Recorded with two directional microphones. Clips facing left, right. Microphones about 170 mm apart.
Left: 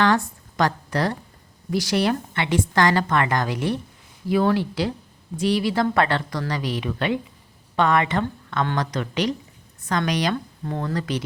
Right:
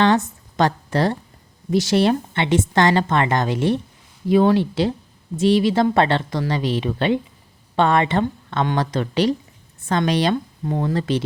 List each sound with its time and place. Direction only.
0.0 s a woman's voice: 25° right (ahead or behind)